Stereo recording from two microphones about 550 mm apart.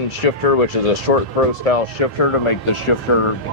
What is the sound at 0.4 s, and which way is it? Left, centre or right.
Speech, left.